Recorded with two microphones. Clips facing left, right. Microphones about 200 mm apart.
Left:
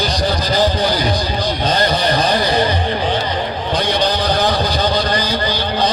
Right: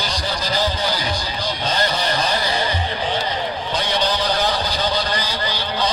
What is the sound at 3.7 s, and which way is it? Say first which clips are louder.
Vehicle: left 5 dB; 55° left (ahead or behind).